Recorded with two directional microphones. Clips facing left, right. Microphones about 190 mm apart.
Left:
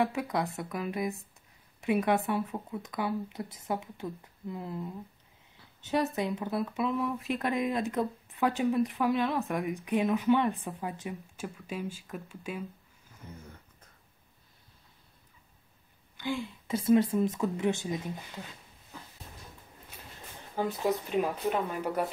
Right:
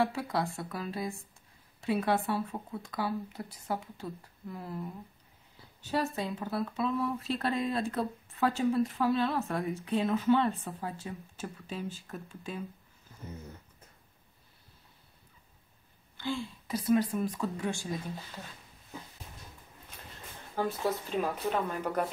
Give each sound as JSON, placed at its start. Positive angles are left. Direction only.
{"t": 0.0, "sound": "speech", "side_deg": 20}
{"t": 5.8, "sound": "a woman's voice", "side_deg": 20}
{"t": 16.2, "sound": "speech", "side_deg": 15}
{"t": 20.5, "sound": "a woman's voice", "side_deg": 15}